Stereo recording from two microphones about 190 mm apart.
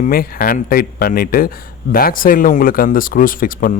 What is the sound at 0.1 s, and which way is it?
Speech, 50° left (ahead or behind).